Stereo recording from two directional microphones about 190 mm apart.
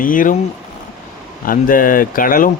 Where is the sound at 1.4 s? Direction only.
45° left (ahead or behind).